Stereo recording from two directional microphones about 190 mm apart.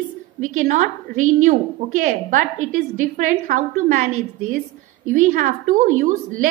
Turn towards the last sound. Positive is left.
turn(degrees=-40)  # may be behind; listen again after turning